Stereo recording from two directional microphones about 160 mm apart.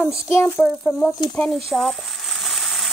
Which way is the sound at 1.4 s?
Centre (ahead or behind).